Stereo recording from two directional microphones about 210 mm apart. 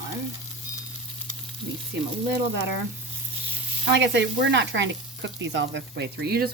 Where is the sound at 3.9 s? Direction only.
55° right (ahead or behind).